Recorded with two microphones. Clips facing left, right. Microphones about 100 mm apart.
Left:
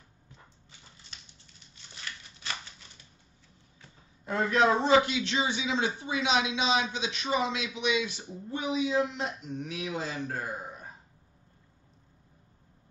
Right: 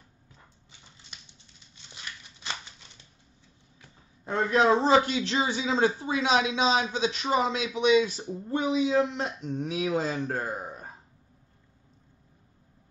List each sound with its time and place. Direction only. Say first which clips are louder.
4.3 s a man's voice: right 2 dB; 30° right (ahead or behind)